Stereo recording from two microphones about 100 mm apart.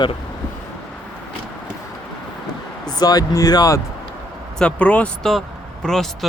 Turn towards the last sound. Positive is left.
turn(degrees=5)  # may be behind; listen again after turning